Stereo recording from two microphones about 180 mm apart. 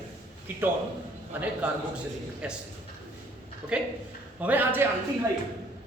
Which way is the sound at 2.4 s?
5° right (ahead or behind).